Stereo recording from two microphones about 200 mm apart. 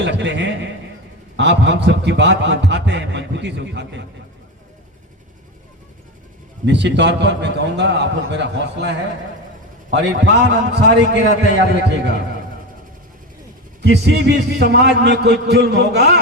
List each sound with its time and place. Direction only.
0.0 s a man's voice: 60° right (ahead or behind)
6.7 s a man's voice: 60° right (ahead or behind)
13.8 s a man's voice: 55° right (ahead or behind)